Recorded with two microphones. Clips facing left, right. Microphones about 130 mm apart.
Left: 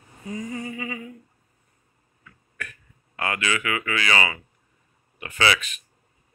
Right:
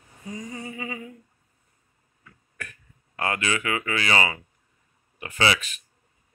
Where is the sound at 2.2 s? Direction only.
35° right (ahead or behind).